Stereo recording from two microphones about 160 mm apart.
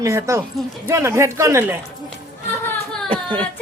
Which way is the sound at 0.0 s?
20° right (ahead or behind).